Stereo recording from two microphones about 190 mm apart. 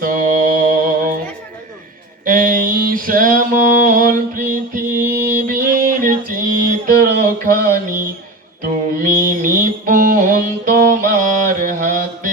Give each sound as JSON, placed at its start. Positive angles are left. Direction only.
{"t": 0.0, "sound": "mantra", "side_deg": -45}
{"t": 2.2, "sound": "mantra", "side_deg": -45}
{"t": 5.5, "sound": "a sound", "side_deg": -45}
{"t": 8.6, "sound": "music", "side_deg": -50}